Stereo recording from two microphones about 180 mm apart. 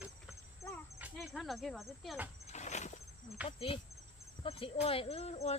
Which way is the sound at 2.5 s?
40° left (ahead or behind).